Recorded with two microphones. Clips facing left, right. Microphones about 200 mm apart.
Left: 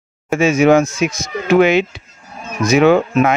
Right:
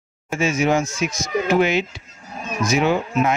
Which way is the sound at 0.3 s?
65° left (ahead or behind).